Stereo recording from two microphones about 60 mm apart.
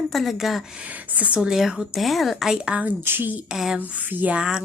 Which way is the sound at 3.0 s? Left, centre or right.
Right.